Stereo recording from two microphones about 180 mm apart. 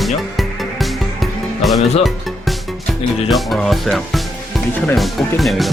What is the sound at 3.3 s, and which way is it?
Speech, centre (ahead or behind).